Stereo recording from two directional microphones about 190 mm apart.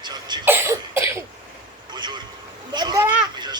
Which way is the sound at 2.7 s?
20° right (ahead or behind).